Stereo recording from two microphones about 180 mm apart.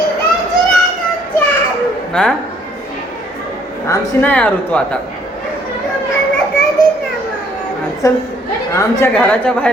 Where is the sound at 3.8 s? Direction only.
10° left (ahead or behind).